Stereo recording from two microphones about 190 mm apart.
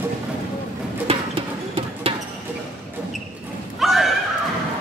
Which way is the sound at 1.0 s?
30° right (ahead or behind).